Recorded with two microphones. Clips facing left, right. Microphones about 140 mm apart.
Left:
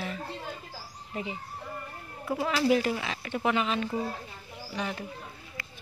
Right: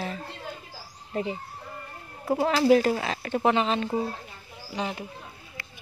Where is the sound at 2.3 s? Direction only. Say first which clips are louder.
Right 5 dB; 35° right (ahead or behind).